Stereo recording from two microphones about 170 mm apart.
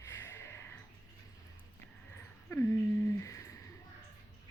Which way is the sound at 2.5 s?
15° left (ahead or behind).